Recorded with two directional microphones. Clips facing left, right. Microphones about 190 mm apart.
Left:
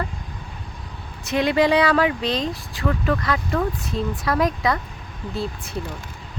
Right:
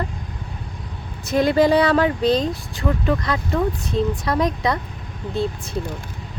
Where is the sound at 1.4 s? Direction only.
40° right (ahead or behind).